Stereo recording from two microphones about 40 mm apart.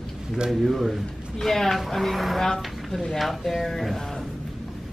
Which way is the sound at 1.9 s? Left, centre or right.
Centre.